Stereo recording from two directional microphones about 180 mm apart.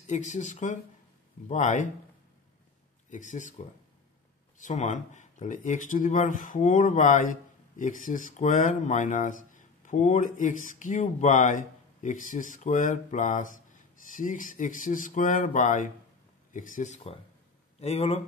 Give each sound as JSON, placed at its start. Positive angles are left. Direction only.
{"t": 0.0, "sound": "speech", "side_deg": 40}
{"t": 3.1, "sound": "speech", "side_deg": 45}